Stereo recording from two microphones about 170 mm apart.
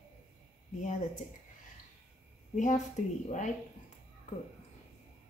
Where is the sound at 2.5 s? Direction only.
45° left (ahead or behind).